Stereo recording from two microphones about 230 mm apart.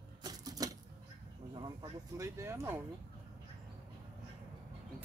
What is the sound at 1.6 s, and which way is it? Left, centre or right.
Speech, centre.